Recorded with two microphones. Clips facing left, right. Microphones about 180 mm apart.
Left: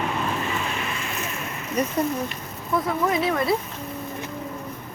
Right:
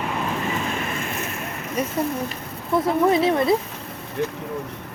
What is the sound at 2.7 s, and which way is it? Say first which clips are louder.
Speech: right 5 dB; 30° right (ahead or behind).